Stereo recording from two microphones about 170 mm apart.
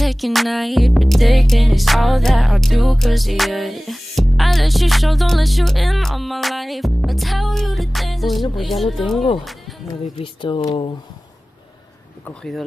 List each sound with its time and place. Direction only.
0.0 s music: centre (ahead or behind)
9.4 s speech: centre (ahead or behind)
10.1 s speech: 30° left (ahead or behind)
12.3 s music: centre (ahead or behind)